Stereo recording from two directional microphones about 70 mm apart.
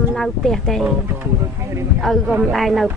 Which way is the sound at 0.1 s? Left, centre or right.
Centre.